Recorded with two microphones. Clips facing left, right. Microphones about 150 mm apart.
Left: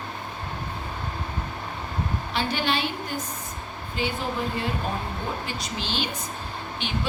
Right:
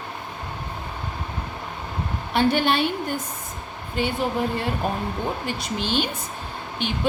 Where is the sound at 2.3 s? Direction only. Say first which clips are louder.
Right 7 dB; 50° right (ahead or behind).